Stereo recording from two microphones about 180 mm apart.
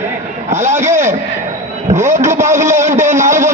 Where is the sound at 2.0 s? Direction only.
40° right (ahead or behind).